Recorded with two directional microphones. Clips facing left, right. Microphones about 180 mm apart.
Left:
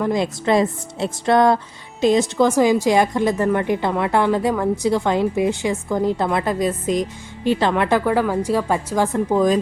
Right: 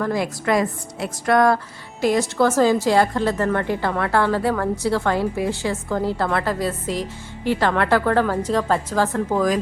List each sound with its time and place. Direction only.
0.0 s a woman's voice: 20° left (ahead or behind)